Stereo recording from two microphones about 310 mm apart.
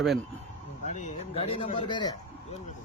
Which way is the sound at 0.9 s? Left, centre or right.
Left.